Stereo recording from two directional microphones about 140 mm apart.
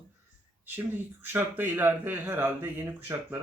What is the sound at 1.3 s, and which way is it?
Speech, 15° right (ahead or behind).